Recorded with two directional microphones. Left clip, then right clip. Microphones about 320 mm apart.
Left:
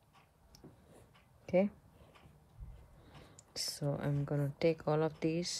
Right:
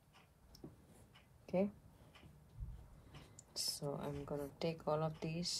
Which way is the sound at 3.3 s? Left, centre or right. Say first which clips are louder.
Left 2 dB; left.